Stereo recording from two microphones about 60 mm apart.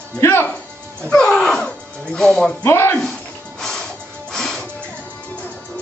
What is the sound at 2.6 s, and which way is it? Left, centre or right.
Speech, left.